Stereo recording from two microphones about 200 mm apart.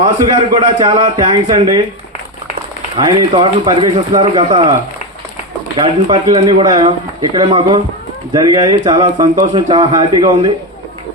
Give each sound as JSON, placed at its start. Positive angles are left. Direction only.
{"t": 0.0, "sound": "speech", "side_deg": -20}
{"t": 3.0, "sound": "speech", "side_deg": -20}
{"t": 5.8, "sound": "speech", "side_deg": -20}